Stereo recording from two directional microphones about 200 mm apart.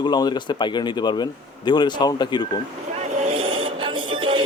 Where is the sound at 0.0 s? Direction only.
20° left (ahead or behind).